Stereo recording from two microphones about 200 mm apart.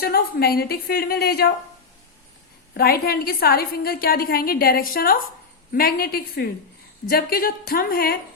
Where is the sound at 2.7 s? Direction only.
50° left (ahead or behind).